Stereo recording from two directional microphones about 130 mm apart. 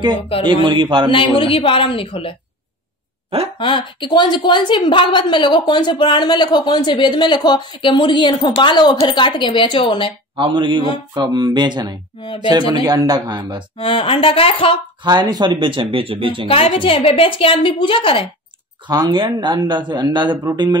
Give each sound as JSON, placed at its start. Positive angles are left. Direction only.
{"t": 0.3, "sound": "a woman's voice", "side_deg": 45}
{"t": 0.7, "sound": "speech", "side_deg": -40}
{"t": 1.1, "sound": "a woman's voice", "side_deg": 40}
{"t": 3.5, "sound": "a woman's voice", "side_deg": 40}
{"t": 10.3, "sound": "speech", "side_deg": -40}
{"t": 13.7, "sound": "a woman's voice", "side_deg": 45}
{"t": 15.0, "sound": "speech", "side_deg": -30}
{"t": 16.4, "sound": "a woman's voice", "side_deg": 45}
{"t": 18.9, "sound": "speech", "side_deg": -30}